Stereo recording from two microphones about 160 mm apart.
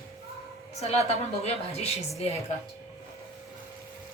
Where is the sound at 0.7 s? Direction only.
40° left (ahead or behind).